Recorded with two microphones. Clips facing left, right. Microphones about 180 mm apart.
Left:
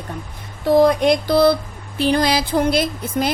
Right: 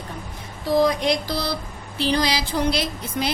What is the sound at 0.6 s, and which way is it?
A woman's voice, 60° left (ahead or behind).